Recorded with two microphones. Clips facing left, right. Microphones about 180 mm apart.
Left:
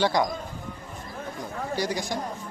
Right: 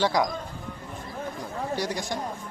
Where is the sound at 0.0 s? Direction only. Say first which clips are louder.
Even; centre (ahead or behind).